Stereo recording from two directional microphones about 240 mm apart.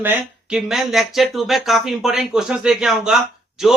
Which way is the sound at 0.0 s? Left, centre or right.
Centre.